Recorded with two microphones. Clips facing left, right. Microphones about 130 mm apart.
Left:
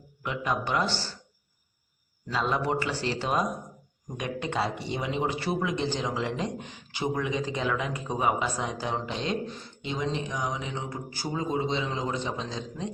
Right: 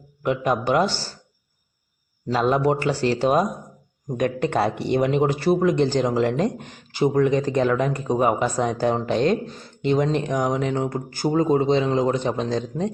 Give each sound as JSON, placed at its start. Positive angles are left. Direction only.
{"t": 0.2, "sound": "speech", "side_deg": -50}
{"t": 2.3, "sound": "a man's voice", "side_deg": -50}